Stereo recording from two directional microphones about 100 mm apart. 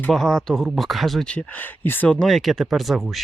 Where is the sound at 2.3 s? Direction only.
Centre (ahead or behind).